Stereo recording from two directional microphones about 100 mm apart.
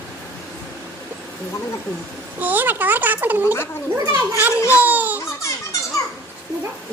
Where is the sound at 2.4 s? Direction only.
15° right (ahead or behind).